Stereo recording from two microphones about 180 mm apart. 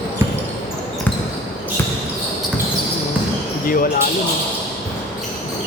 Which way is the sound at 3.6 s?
50° left (ahead or behind).